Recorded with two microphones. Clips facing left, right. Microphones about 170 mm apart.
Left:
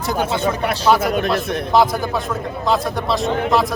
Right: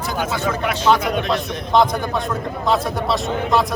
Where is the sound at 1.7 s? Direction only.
5° left (ahead or behind).